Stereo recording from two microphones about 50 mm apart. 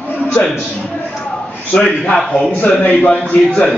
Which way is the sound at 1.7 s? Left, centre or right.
Left.